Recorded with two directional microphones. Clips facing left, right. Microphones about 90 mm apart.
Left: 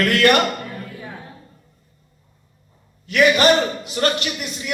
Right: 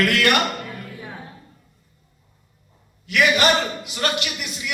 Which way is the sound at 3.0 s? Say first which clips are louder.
Left 3 dB; 35° left (ahead or behind).